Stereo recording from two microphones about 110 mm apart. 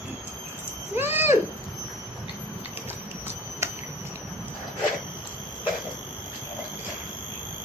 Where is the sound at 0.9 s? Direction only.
20° right (ahead or behind).